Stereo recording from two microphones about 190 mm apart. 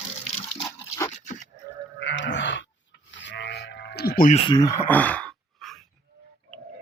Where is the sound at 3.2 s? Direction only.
70° left (ahead or behind); by 4.3 s 50° left (ahead or behind).